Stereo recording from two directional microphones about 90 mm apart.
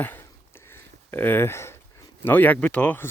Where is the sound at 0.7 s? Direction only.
25° left (ahead or behind).